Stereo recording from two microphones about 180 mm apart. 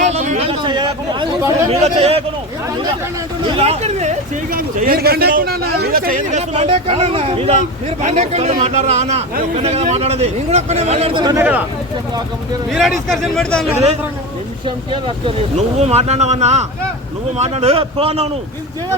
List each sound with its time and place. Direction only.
0.1 s speech: 35° right (ahead or behind)
3.4 s speech: 35° right (ahead or behind)
4.5 s speech: 55° right (ahead or behind)
6.3 s a man's voice: 35° right (ahead or behind)
11.3 s speech: 10° right (ahead or behind)
12.7 s speech: centre (ahead or behind)
15.8 s a man's voice: 35° right (ahead or behind)